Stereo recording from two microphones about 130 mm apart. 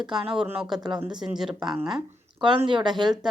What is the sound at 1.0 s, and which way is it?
Speech, 5° right (ahead or behind).